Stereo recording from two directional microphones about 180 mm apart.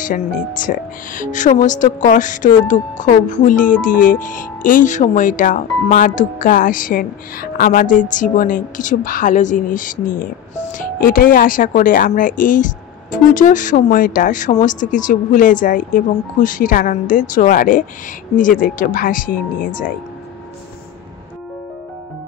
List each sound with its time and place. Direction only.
0.0 s speech: 45° left (ahead or behind)